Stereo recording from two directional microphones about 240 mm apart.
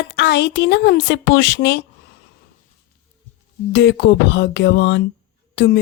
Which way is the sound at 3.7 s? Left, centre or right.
Left.